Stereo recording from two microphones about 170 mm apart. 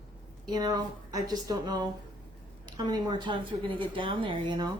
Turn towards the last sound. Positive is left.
turn(degrees=-30)  # may be behind; listen again after turning